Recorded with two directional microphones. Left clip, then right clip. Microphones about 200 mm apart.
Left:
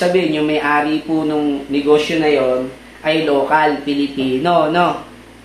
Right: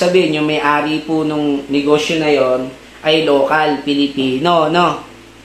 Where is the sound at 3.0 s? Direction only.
30° right (ahead or behind).